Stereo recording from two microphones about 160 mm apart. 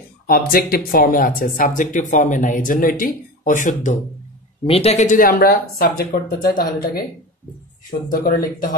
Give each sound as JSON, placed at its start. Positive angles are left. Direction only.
{"t": 0.3, "sound": "speech", "side_deg": 70}
{"t": 4.6, "sound": "speech", "side_deg": 40}
{"t": 8.1, "sound": "speech", "side_deg": 60}